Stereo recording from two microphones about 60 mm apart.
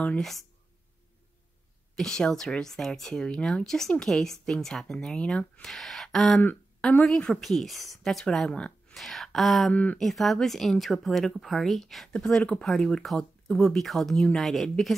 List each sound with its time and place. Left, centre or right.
0.2 s speech: centre
2.0 s speech: centre
4.9 s speech: centre
6.8 s a woman's voice: left
7.1 s speech: centre
8.9 s speech: centre
9.7 s speech: left
9.9 s speech: centre